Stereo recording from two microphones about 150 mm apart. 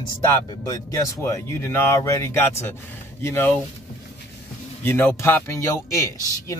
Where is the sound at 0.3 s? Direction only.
20° left (ahead or behind).